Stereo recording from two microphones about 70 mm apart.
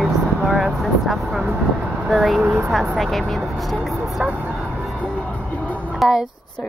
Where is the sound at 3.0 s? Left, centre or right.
Centre.